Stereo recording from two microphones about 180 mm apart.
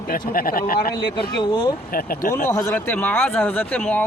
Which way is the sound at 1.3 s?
25° left (ahead or behind).